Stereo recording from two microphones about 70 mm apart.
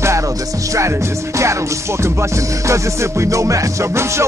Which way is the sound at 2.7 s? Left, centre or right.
Right.